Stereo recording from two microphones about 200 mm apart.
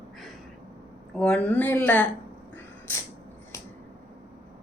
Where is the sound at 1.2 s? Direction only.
5° left (ahead or behind).